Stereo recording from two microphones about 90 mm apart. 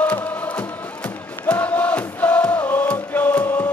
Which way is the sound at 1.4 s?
20° left (ahead or behind).